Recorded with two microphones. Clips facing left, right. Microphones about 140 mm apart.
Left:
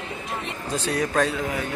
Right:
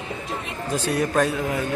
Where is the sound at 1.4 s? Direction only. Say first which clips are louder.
Right 3 dB; 20° right (ahead or behind).